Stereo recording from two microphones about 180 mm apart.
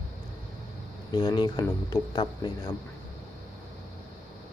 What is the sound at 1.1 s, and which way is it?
Speech, 25° left (ahead or behind).